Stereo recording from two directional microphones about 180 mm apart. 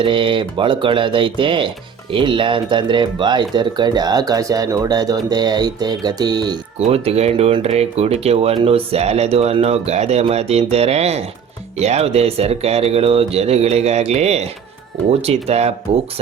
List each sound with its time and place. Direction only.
0.0 s speech: 30° right (ahead or behind)
6.7 s speech: 35° right (ahead or behind)